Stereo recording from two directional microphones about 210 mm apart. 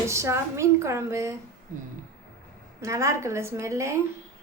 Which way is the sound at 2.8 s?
15° right (ahead or behind).